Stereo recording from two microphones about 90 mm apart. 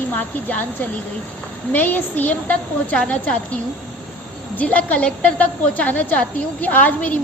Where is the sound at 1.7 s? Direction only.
20° left (ahead or behind).